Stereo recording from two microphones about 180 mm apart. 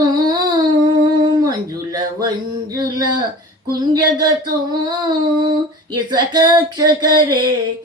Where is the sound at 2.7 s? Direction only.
20° right (ahead or behind).